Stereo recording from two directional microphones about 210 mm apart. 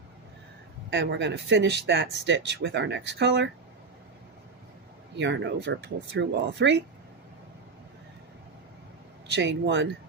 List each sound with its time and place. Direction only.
0.9 s speech: 55° right (ahead or behind)
5.1 s speech: 55° right (ahead or behind)
9.3 s speech: 55° right (ahead or behind)